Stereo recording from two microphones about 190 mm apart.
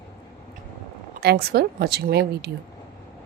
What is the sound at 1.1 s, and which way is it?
A woman's voice, 55° right (ahead or behind).